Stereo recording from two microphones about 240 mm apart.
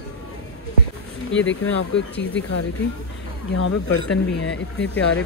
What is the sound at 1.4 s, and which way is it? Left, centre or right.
Speech, left.